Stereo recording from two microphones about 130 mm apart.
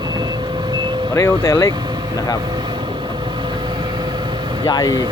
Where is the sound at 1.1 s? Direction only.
20° left (ahead or behind).